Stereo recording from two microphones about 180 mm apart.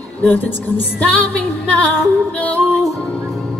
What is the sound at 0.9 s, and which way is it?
Music, 10° left (ahead or behind).